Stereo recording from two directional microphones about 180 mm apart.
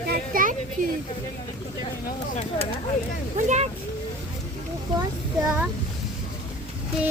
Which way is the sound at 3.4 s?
40° right (ahead or behind).